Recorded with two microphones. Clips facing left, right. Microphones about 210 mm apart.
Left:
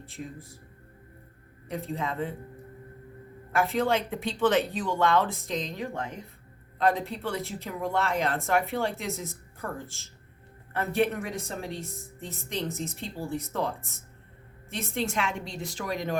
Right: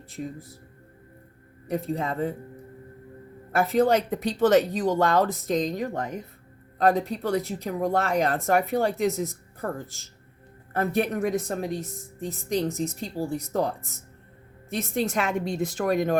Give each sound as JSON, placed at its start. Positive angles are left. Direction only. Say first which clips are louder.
{"t": 1.9, "sound": "speech", "louder": "right 3 dB", "side_deg": -40}
{"t": 3.8, "sound": "speech", "louder": "right 5 dB", "side_deg": -40}
{"t": 15.4, "sound": "speech", "louder": "right 9 dB", "side_deg": -55}